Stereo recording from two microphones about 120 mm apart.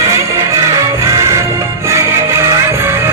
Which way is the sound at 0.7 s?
25° right (ahead or behind).